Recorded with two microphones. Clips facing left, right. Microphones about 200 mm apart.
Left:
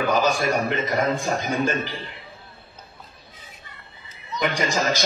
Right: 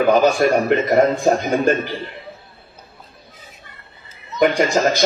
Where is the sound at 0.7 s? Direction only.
50° right (ahead or behind).